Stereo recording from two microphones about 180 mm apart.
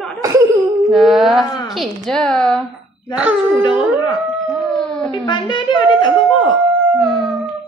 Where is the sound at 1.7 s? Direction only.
Centre (ahead or behind).